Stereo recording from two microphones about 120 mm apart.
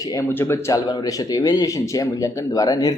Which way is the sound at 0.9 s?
30° left (ahead or behind).